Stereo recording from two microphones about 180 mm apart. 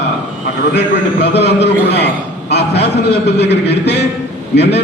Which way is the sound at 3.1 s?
70° left (ahead or behind).